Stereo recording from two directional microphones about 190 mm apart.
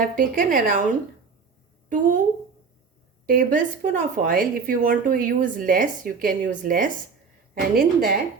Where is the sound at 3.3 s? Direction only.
45° right (ahead or behind).